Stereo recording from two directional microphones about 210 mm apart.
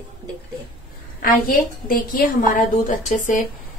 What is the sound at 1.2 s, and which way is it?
A woman's voice, 40° left (ahead or behind).